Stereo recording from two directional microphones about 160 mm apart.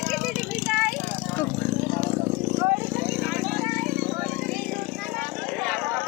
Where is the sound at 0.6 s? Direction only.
Centre (ahead or behind).